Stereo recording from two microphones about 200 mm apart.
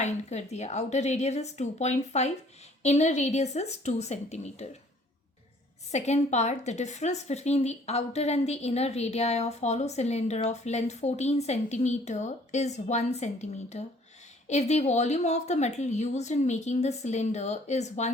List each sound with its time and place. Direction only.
0.0 s a woman's voice: 35° left (ahead or behind)
5.9 s a woman's voice: 35° left (ahead or behind)